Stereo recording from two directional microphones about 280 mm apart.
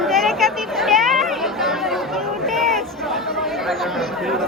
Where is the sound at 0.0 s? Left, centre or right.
Centre.